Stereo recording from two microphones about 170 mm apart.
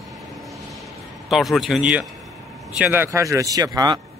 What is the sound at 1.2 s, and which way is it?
Speech, centre (ahead or behind).